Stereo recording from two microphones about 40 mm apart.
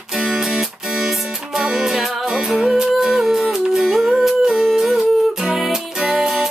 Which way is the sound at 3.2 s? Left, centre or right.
Centre.